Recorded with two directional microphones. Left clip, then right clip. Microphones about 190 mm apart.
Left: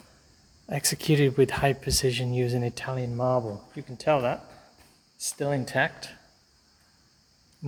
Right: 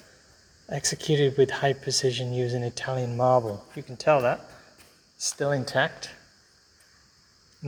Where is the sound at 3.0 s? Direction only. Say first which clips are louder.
Right 5 dB; centre (ahead or behind).